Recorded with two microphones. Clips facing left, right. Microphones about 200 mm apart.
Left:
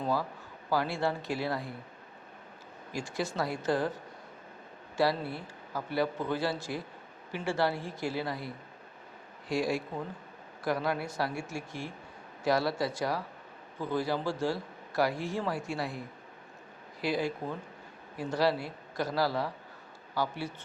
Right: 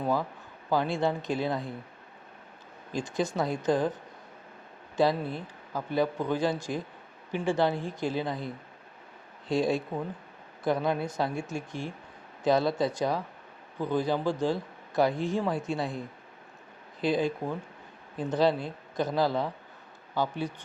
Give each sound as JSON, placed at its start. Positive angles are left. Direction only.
{"t": 0.0, "sound": "a man's voice", "side_deg": -15}
{"t": 2.9, "sound": "speech", "side_deg": -20}
{"t": 4.9, "sound": "a man's voice", "side_deg": -20}